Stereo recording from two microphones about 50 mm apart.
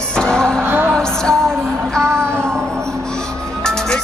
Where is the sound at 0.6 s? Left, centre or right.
Right.